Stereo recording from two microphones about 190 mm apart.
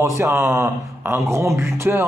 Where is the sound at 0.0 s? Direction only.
15° right (ahead or behind).